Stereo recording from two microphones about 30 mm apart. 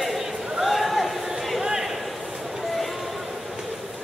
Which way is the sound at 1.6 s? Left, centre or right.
Centre.